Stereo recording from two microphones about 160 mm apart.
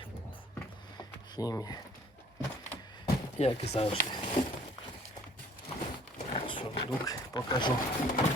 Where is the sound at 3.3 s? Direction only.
40° left (ahead or behind).